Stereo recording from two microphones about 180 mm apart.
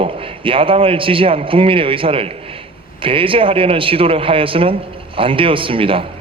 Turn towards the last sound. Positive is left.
turn(degrees=-30)  # may be behind; listen again after turning